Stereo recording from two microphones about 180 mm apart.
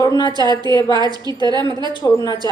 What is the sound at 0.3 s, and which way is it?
Speech, 20° right (ahead or behind).